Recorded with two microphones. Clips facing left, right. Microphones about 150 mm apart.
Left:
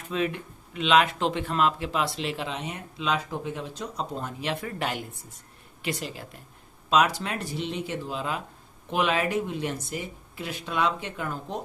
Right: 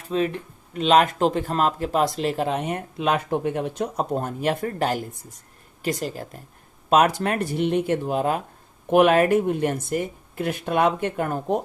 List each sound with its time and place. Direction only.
0.1 s speech: 35° right (ahead or behind); by 11.6 s 55° right (ahead or behind)